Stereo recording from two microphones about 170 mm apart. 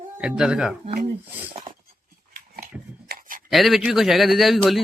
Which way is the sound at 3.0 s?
55° right (ahead or behind).